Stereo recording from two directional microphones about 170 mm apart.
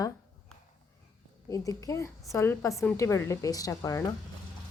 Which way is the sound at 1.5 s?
20° left (ahead or behind).